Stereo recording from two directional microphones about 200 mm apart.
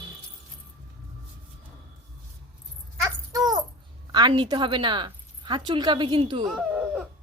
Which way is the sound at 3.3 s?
20° right (ahead or behind).